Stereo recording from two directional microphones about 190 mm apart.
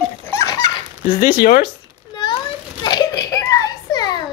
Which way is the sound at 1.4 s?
55° left (ahead or behind).